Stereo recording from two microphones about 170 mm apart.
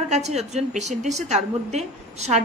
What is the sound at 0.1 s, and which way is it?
A woman's voice, 40° right (ahead or behind).